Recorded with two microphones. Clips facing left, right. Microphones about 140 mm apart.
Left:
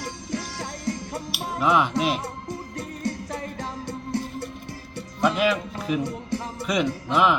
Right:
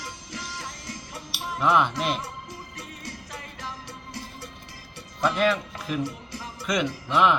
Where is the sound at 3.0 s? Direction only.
25° left (ahead or behind).